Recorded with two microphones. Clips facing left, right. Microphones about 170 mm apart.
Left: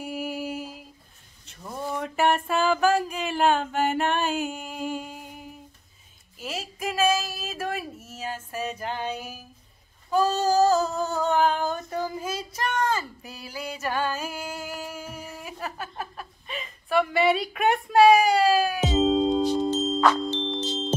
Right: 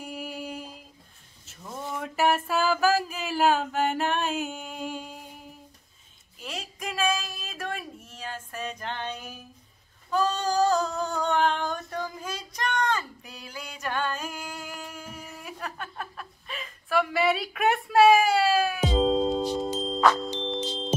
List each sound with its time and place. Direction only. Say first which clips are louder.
0.0 s a sound: left 5 dB; 5° left (ahead or behind)
10.1 s female singing: left 4 dB; 5° left (ahead or behind)
18.9 s music: left 2 dB; centre (ahead or behind)